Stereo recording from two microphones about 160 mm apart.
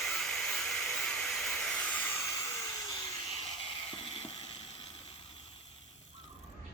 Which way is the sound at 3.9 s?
30° left (ahead or behind).